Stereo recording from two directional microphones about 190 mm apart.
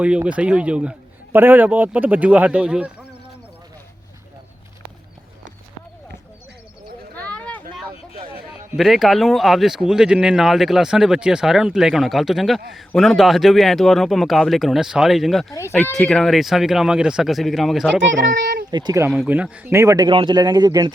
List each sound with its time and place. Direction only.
0.0 s a man's voice: 5° right (ahead or behind)
7.2 s a sound: 5° left (ahead or behind)
8.7 s speech: centre (ahead or behind)
15.5 s speech: 15° left (ahead or behind)
18.7 s speech: 20° right (ahead or behind)
19.1 s speech: 5° right (ahead or behind); by 20.9 s 20° right (ahead or behind)